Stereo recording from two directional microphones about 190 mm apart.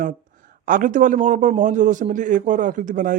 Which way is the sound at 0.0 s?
45° right (ahead or behind).